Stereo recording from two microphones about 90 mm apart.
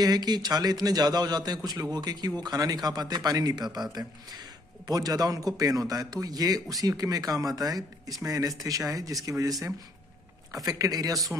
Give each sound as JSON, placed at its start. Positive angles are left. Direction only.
{"t": 0.0, "sound": "a man's voice", "side_deg": -50}